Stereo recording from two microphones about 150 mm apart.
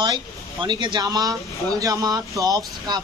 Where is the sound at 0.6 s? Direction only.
30° right (ahead or behind).